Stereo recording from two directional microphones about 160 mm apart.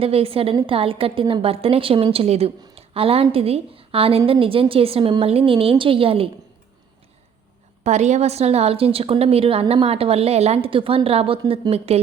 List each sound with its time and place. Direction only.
0.0 s a woman's voice: 35° right (ahead or behind)
7.9 s a woman's voice: 45° right (ahead or behind)